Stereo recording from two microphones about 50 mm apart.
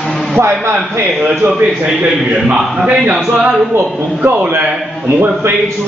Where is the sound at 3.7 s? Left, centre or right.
Right.